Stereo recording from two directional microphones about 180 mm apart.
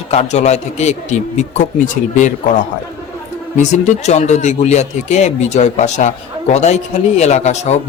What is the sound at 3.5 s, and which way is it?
Speech, 40° left (ahead or behind).